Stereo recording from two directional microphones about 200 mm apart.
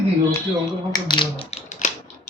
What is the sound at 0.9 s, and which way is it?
Speech, 25° left (ahead or behind).